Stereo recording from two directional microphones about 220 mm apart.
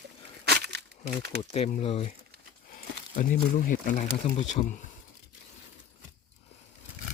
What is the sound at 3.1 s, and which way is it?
Speech, 40° left (ahead or behind).